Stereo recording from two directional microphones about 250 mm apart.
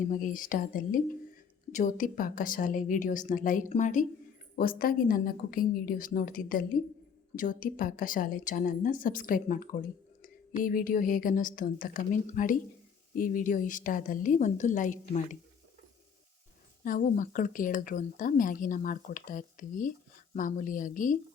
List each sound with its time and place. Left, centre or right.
0.1 s speech: left
16.8 s speech: left